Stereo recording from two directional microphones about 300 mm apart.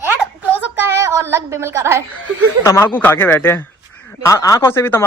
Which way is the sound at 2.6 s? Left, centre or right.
Centre.